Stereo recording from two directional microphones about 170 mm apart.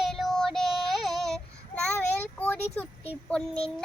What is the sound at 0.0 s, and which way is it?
Child singing, centre (ahead or behind).